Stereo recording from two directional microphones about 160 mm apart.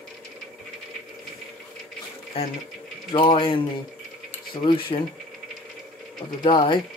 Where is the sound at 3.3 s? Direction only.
35° left (ahead or behind).